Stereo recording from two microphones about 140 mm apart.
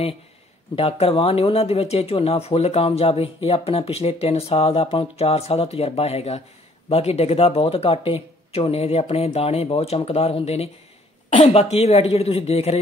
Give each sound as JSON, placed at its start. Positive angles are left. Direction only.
{"t": 0.7, "sound": "speech", "side_deg": 45}